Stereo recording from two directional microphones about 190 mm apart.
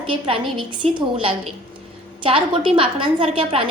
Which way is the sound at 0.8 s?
35° right (ahead or behind).